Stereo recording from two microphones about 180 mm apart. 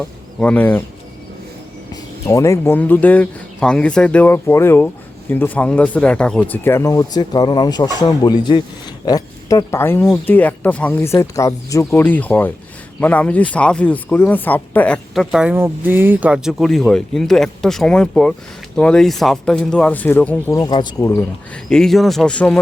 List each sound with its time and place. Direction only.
0.0 s speech: 5° left (ahead or behind)
1.9 s speech: 20° left (ahead or behind)
21.2 s speech: 5° left (ahead or behind)